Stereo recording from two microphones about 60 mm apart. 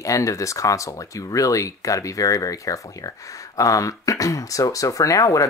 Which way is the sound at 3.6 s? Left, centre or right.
Left.